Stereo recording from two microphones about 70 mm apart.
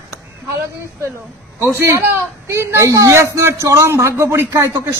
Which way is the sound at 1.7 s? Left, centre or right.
Right.